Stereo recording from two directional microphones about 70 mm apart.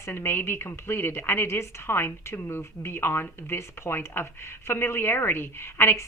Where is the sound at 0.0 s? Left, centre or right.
Left.